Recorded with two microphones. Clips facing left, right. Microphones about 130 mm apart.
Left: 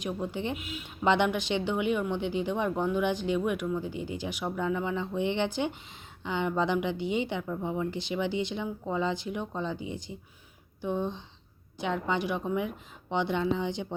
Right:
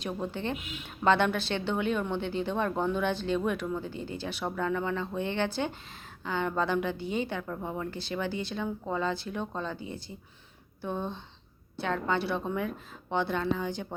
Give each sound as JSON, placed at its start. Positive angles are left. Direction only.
{"t": 0.0, "sound": "speech", "side_deg": 15}